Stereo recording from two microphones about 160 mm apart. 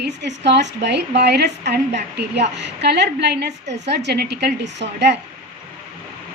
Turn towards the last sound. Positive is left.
turn(degrees=-90)